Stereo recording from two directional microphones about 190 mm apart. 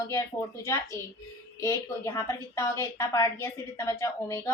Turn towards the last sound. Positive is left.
turn(degrees=15)  # may be behind; listen again after turning